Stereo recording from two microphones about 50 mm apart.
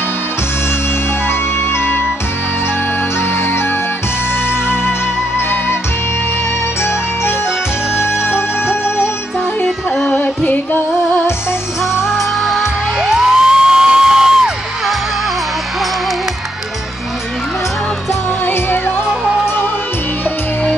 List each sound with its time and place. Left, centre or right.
8.8 s music: left
10.0 s singing: left
12.2 s music: centre
13.0 s music: centre
18.4 s music: left